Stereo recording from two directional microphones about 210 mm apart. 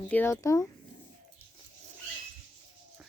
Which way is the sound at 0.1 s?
10° left (ahead or behind).